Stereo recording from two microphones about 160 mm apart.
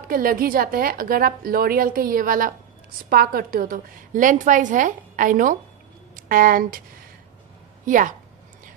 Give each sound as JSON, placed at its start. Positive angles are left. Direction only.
{"t": 0.1, "sound": "a woman's voice", "side_deg": -60}
{"t": 7.8, "sound": "a woman's voice", "side_deg": -55}